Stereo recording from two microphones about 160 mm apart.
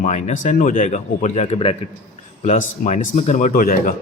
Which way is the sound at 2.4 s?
50° left (ahead or behind).